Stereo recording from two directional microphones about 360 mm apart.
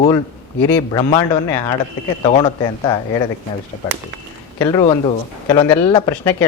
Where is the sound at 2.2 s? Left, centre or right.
Centre.